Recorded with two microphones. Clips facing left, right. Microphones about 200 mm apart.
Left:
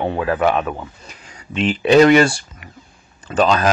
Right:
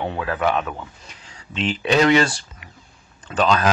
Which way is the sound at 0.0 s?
35° left (ahead or behind).